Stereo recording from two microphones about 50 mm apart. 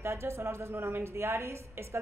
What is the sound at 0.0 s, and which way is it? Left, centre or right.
Speech, right.